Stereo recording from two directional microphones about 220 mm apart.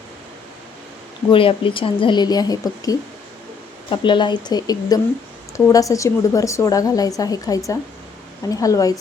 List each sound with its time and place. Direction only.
1.3 s a woman's voice: 25° left (ahead or behind)